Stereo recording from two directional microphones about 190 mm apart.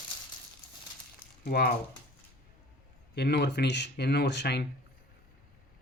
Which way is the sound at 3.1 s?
60° left (ahead or behind).